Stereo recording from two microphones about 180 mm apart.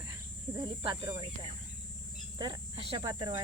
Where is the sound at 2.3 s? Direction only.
25° right (ahead or behind).